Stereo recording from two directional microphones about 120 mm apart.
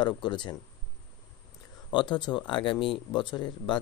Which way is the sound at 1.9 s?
40° left (ahead or behind).